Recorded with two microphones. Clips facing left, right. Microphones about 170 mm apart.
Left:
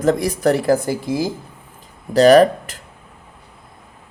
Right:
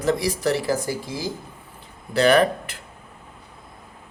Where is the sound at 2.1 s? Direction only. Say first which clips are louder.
Left 7 dB; 40° left (ahead or behind).